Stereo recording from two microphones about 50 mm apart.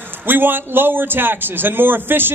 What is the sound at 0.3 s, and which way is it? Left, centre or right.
A man's voice, right.